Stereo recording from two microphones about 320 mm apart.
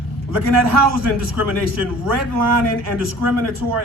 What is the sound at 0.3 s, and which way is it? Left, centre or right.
A man's voice, right.